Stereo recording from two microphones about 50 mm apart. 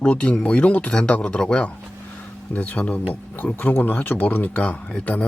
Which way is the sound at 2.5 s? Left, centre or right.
Left.